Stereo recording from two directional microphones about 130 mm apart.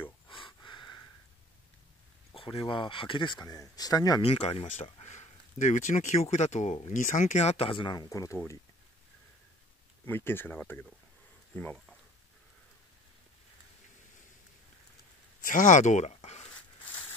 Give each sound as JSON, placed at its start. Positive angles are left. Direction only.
{"t": 0.3, "sound": "a sound", "side_deg": 40}
{"t": 2.3, "sound": "speech", "side_deg": 40}
{"t": 4.2, "sound": "speech", "side_deg": 50}
{"t": 5.0, "sound": "speech", "side_deg": 65}
{"t": 7.0, "sound": "speech", "side_deg": 85}
{"t": 10.0, "sound": "speech", "side_deg": 15}
{"t": 15.4, "sound": "speech", "side_deg": 85}